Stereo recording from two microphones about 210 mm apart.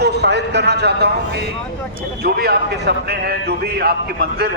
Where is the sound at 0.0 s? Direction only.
50° right (ahead or behind).